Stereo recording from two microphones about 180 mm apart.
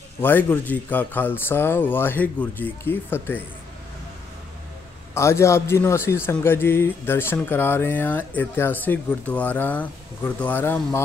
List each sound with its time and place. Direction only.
0.2 s speech: 10° left (ahead or behind)
5.1 s speech: 15° left (ahead or behind)